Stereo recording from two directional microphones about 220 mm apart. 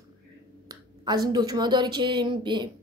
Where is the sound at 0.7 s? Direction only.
15° right (ahead or behind).